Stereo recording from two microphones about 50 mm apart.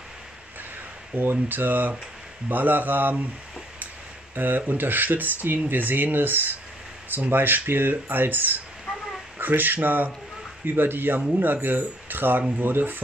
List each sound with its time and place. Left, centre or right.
1.1 s speech: right
4.4 s speech: right